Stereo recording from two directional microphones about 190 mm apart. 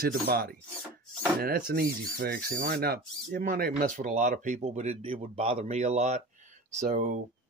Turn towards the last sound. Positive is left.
turn(degrees=-40)  # may be behind; listen again after turning